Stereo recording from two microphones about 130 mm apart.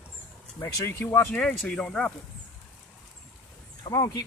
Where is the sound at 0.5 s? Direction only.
20° left (ahead or behind); by 2.1 s 5° left (ahead or behind).